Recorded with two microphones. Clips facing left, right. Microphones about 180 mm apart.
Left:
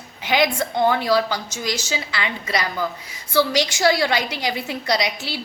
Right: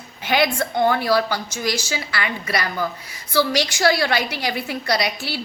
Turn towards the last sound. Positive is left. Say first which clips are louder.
# even
turn(degrees=20)  # may be behind; listen again after turning